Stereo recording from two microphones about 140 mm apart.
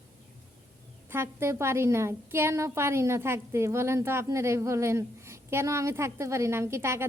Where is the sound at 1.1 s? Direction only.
20° right (ahead or behind).